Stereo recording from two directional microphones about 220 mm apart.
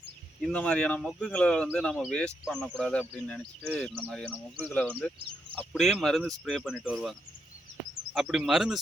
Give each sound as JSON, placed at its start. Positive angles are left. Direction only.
{"t": 0.4, "sound": "speech", "side_deg": 5}
{"t": 4.6, "sound": "speech", "side_deg": 5}